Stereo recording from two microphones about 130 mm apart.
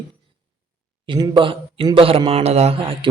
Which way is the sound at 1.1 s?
40° right (ahead or behind).